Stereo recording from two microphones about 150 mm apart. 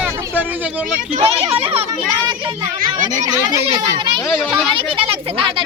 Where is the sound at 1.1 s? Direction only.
40° right (ahead or behind).